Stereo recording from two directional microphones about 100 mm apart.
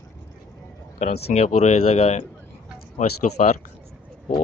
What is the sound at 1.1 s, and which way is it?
Speech, 90° left.